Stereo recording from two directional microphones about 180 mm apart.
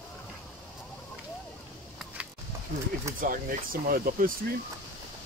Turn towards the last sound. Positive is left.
turn(degrees=-55)  # may be behind; listen again after turning